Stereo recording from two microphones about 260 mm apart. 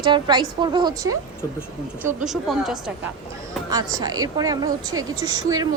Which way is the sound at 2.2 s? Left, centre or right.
Centre.